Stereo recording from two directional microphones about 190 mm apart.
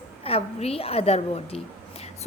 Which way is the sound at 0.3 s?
30° left (ahead or behind).